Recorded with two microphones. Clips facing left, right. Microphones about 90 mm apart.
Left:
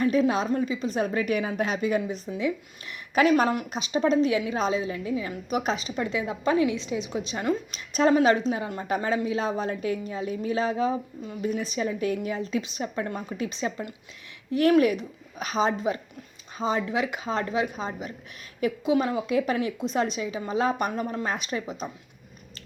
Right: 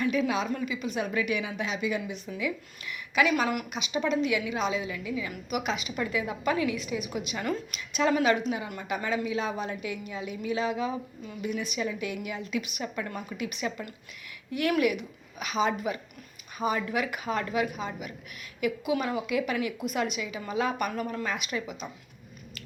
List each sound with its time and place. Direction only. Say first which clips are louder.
0.0 s a woman's voice: left 4 dB; 40° left (ahead or behind)